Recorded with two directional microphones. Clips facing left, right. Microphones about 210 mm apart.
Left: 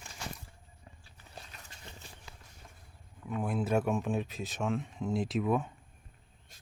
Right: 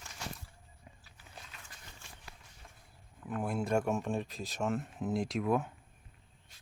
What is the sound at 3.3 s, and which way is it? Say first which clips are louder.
Speech: left 1 dB; centre (ahead or behind).